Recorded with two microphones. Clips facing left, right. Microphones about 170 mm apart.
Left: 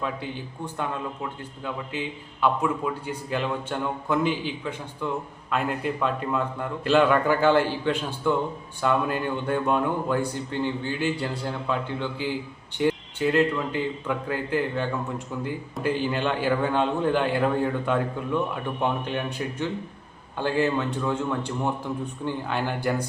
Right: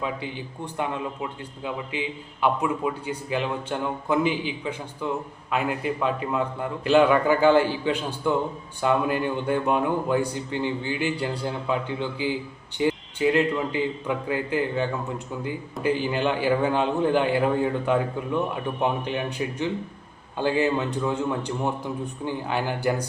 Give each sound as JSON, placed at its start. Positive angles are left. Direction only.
{"t": 0.8, "sound": "a man's voice", "side_deg": -10}